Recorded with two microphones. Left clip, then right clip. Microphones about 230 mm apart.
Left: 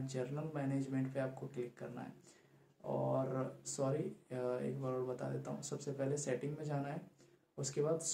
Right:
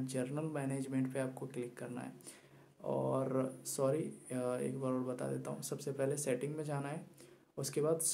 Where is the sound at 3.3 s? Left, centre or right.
Right.